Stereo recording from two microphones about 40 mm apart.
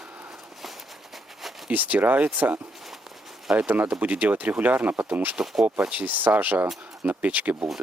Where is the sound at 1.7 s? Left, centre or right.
Right.